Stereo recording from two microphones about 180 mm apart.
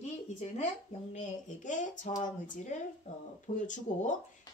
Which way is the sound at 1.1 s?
45° left (ahead or behind).